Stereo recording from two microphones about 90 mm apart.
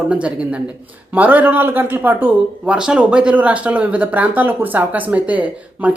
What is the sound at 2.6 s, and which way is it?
A woman's voice, 10° right (ahead or behind).